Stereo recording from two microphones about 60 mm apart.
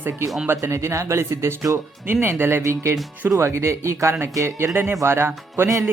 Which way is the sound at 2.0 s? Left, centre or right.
Right.